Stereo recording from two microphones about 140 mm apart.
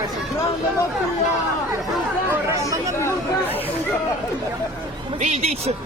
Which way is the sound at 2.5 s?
20° right (ahead or behind).